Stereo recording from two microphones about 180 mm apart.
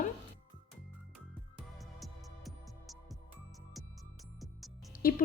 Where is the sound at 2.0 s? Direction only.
Centre (ahead or behind).